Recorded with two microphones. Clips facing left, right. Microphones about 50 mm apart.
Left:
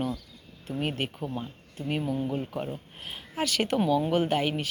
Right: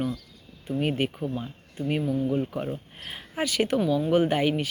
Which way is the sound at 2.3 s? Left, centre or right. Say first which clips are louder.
Right 4 dB; centre.